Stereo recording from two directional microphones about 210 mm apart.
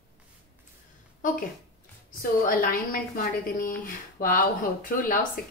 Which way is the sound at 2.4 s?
40° left (ahead or behind).